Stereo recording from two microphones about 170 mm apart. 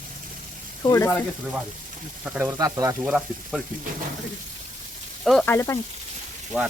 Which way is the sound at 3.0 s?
5° right (ahead or behind).